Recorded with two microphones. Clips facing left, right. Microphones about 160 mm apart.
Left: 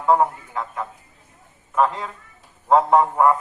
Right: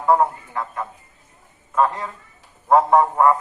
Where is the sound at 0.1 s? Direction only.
20° left (ahead or behind).